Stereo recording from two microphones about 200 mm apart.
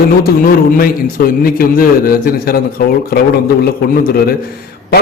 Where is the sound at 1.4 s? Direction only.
45° left (ahead or behind).